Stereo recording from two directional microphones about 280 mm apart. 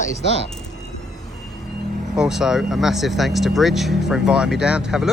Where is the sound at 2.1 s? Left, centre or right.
Centre.